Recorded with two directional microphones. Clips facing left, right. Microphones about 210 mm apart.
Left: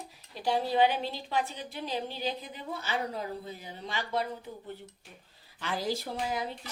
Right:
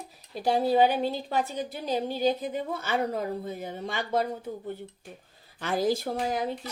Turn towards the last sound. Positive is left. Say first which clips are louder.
# right 5 dB
turn(degrees=-45)  # may be behind; listen again after turning